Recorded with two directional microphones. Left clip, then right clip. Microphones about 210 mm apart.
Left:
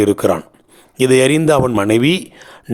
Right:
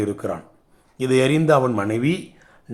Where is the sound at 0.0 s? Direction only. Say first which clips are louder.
Left 11 dB; 50° left (ahead or behind).